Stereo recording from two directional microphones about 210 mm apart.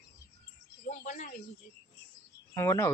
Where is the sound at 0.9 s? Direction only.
35° left (ahead or behind).